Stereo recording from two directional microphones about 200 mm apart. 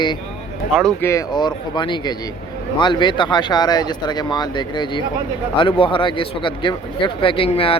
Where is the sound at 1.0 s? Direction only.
20° left (ahead or behind).